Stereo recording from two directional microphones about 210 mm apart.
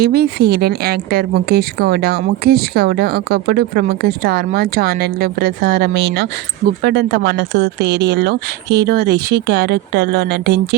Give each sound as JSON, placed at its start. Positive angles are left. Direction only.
{"t": 0.0, "sound": "a woman's voice", "side_deg": -50}